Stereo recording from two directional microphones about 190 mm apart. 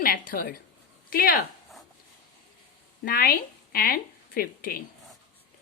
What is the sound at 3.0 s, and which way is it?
A woman's voice, 50° left (ahead or behind).